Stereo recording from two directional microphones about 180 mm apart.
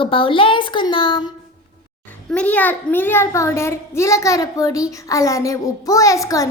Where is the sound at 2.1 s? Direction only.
5° left (ahead or behind).